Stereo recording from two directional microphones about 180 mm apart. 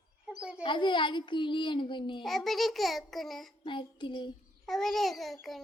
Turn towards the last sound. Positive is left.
turn(degrees=0)  # may be behind; listen again after turning